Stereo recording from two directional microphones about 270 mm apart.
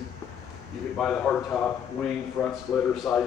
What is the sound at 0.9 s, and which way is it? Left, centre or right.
Speech, centre.